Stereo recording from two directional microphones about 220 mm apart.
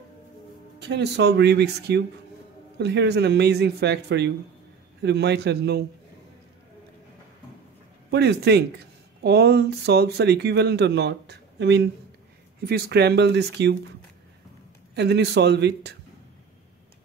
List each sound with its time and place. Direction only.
0.7 s speech: 50° right (ahead or behind)
8.1 s speech: 50° right (ahead or behind)
15.0 s speech: 50° right (ahead or behind)